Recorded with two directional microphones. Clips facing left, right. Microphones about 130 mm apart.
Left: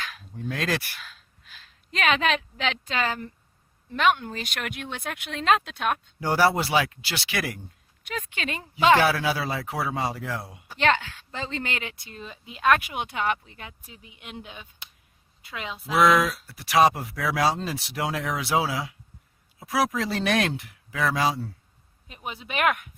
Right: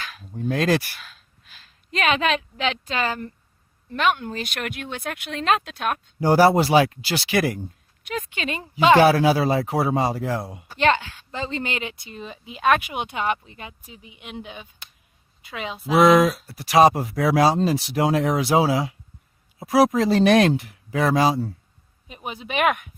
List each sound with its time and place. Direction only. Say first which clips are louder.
0.0 s a sound: right 1 dB; 10° right (ahead or behind)
0.3 s speech: right 7 dB; 35° right (ahead or behind)
1.9 s a woman's voice: right 2 dB; 5° right (ahead or behind)
6.1 s speech: right 7 dB; 40° right (ahead or behind)
8.0 s a woman's voice: right 4 dB; 10° right (ahead or behind)
9.0 s speech: right 8 dB; 40° right (ahead or behind)
10.8 s a woman's voice: right 3 dB; 10° right (ahead or behind)
16.5 s speech: right 3 dB; 35° right (ahead or behind)
22.0 s a woman's voice: right 3 dB; 15° right (ahead or behind)